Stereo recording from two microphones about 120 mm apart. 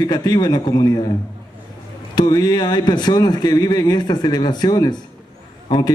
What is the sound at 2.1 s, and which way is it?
A man's voice, 35° left (ahead or behind).